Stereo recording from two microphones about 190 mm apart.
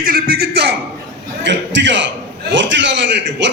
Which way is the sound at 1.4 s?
70° right (ahead or behind).